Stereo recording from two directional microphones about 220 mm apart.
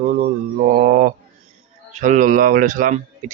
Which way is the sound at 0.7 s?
40° right (ahead or behind).